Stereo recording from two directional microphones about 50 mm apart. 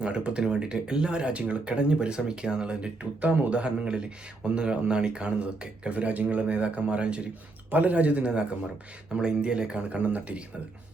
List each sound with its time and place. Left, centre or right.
0.0 s speech: right